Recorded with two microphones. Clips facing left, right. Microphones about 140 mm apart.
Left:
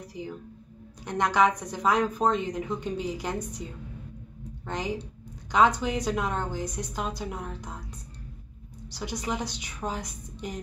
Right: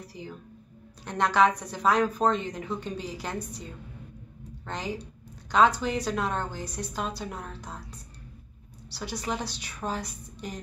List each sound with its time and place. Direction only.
0.0 s a woman's voice: 15° left (ahead or behind)
4.6 s a woman's voice: 15° left (ahead or behind)